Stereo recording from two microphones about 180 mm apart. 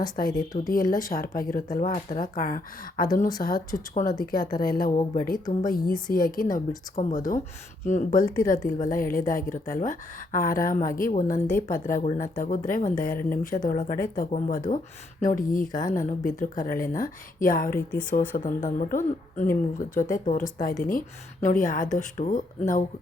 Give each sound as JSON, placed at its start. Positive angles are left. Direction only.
{"t": 0.7, "sound": "a woman's voice", "side_deg": 50}